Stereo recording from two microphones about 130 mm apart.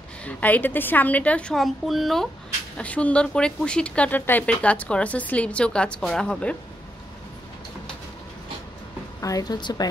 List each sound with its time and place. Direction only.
0.2 s speech: 15° left (ahead or behind)
9.2 s a woman's voice: 30° left (ahead or behind)